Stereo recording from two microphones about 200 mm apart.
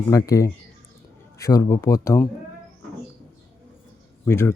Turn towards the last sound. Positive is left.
turn(degrees=15)  # may be behind; listen again after turning